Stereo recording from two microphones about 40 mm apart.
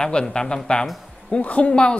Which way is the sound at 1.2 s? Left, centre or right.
Left.